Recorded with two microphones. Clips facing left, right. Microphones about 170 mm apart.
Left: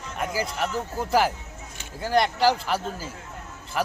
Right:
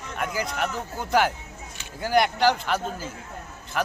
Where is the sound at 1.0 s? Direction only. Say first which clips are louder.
Even; centre (ahead or behind).